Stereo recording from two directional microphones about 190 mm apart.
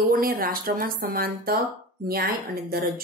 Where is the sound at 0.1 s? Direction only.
50° right (ahead or behind).